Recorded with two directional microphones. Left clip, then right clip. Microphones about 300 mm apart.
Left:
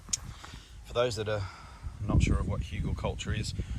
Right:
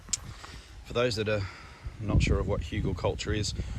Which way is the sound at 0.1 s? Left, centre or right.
Centre.